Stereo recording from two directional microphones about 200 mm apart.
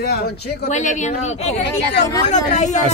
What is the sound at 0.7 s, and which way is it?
Speech, 35° left (ahead or behind).